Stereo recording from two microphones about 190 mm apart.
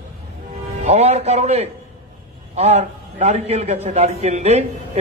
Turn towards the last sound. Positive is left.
turn(degrees=-35)  # may be behind; listen again after turning